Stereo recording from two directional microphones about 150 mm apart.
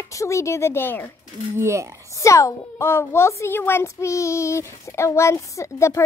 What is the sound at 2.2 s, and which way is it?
A child's voice, 20° left (ahead or behind).